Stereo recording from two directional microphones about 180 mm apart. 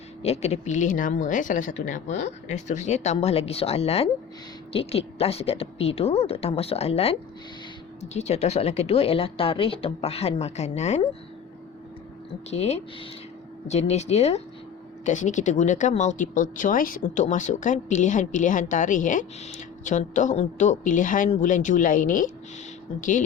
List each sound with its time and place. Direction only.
0.2 s speech: 35° left (ahead or behind)
12.5 s speech: 35° left (ahead or behind)